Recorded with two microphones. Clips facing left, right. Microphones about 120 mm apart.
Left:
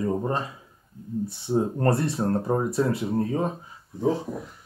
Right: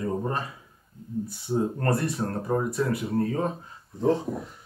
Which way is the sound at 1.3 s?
25° left (ahead or behind).